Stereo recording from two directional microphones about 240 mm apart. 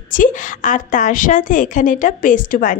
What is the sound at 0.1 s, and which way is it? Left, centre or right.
A woman's voice, left.